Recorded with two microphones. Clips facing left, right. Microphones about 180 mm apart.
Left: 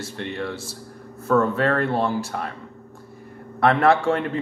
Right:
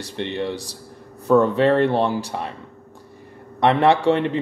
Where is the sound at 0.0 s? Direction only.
20° right (ahead or behind).